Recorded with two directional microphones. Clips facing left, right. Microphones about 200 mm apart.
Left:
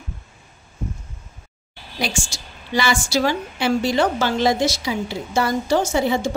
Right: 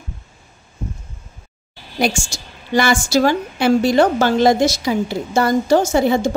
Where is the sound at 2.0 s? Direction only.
50° right (ahead or behind).